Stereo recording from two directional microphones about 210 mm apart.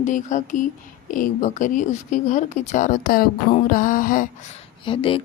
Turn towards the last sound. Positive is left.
turn(degrees=25)  # may be behind; listen again after turning